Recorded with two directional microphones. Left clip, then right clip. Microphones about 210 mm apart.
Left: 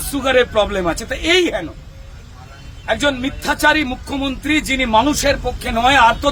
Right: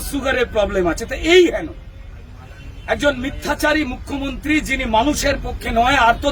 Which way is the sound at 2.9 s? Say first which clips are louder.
Left 1 dB; 25° left (ahead or behind).